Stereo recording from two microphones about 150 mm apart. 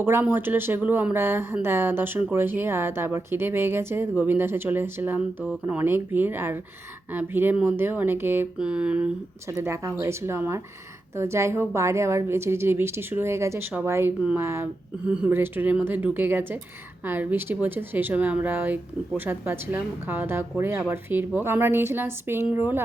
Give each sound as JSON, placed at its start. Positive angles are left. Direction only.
{"t": 0.0, "sound": "a woman's voice", "side_deg": -15}
{"t": 9.5, "sound": "a woman's voice", "side_deg": -20}